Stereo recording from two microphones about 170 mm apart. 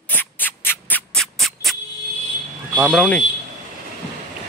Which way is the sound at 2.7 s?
10° right (ahead or behind).